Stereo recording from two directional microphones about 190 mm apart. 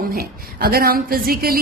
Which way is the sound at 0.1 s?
50° right (ahead or behind).